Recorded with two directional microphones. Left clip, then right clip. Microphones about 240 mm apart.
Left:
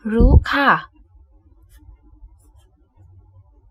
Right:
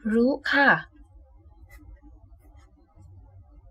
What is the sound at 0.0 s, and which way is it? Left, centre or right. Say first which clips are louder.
Speech: left 4 dB; centre.